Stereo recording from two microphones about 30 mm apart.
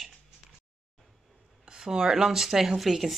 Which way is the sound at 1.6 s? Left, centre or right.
Right.